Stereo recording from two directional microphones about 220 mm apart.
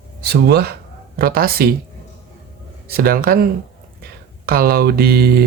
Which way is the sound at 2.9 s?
45° right (ahead or behind).